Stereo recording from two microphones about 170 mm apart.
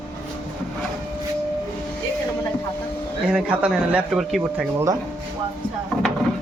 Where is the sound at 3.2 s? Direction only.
5° right (ahead or behind).